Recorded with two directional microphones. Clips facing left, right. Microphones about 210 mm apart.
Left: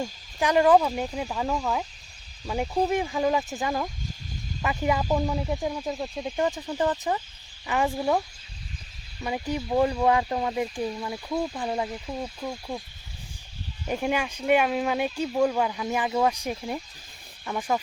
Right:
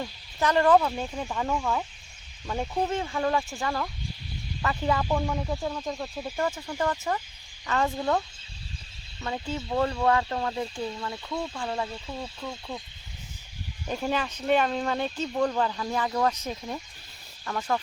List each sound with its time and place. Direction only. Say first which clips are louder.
0.0 s speech: left 1 dB; 15° left (ahead or behind)
9.2 s speech: left 3 dB; 15° left (ahead or behind)
13.8 s speech: left 2 dB; 10° left (ahead or behind)